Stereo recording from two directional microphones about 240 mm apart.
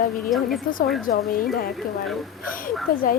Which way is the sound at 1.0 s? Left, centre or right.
Left.